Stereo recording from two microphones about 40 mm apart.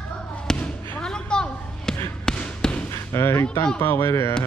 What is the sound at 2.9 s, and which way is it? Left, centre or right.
Speech, left.